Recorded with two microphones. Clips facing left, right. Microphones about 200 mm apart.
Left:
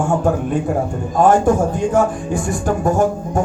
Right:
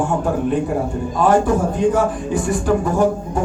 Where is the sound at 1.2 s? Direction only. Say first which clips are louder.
Left 3 dB; 45° left (ahead or behind).